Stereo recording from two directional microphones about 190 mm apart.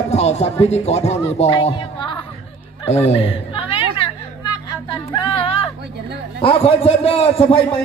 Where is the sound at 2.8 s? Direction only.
35° left (ahead or behind).